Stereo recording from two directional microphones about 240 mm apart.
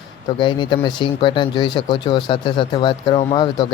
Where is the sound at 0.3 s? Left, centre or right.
Centre.